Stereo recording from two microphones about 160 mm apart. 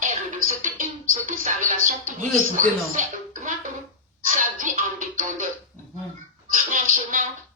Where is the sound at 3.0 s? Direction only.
50° right (ahead or behind).